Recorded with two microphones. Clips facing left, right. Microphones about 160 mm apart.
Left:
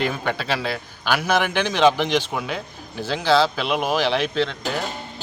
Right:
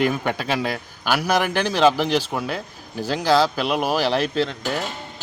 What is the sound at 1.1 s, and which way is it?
Speech, 10° right (ahead or behind).